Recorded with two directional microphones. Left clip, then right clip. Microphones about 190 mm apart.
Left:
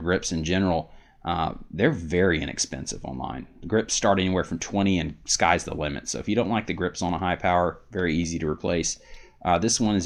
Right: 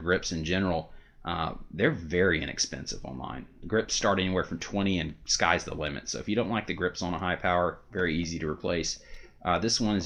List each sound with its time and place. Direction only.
0.0 s speech: 40° left (ahead or behind)